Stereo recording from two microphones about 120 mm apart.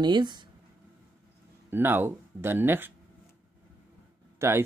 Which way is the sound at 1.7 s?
20° right (ahead or behind).